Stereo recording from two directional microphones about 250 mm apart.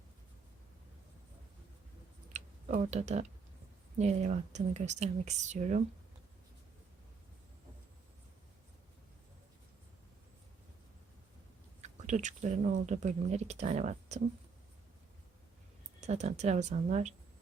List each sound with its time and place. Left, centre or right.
2.3 s tick-tock: right
3.9 s speech: right
11.8 s a sound: right
12.8 s speech: right
16.0 s speech: right